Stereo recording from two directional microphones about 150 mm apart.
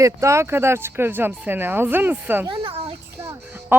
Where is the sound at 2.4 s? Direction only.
40° right (ahead or behind).